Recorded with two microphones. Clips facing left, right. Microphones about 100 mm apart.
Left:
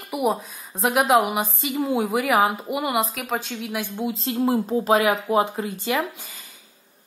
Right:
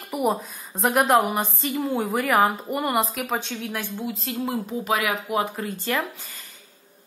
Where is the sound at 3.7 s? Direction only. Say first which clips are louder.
Left 5 dB; 15° left (ahead or behind).